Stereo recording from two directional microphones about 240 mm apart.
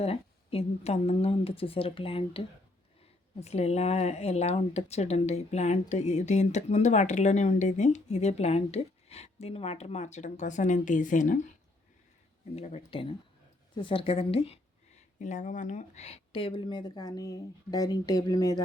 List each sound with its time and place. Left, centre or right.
0.0 s speech: left
3.4 s speech: left
12.5 s speech: left